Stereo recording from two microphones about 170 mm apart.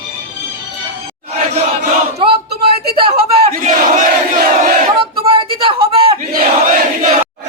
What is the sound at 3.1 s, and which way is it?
Battle cry, 55° right (ahead or behind).